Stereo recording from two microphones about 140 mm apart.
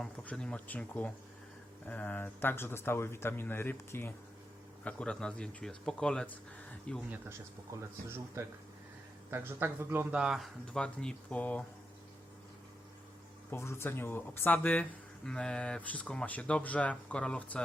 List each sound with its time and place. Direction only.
0.0 s speech: 5° left (ahead or behind)
7.1 s speech: 15° right (ahead or behind); by 11.6 s 10° left (ahead or behind)
13.5 s speech: 20° left (ahead or behind)